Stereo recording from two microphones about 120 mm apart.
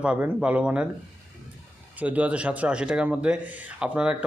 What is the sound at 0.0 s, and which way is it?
Speech, 10° right (ahead or behind).